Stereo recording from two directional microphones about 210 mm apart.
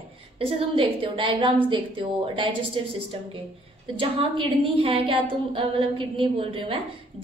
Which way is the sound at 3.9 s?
25° right (ahead or behind).